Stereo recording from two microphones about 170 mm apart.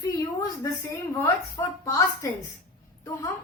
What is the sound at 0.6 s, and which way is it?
A woman's voice, 15° left (ahead or behind).